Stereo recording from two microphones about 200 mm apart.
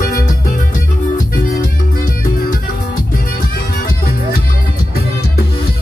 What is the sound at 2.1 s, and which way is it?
Music, 45° left (ahead or behind).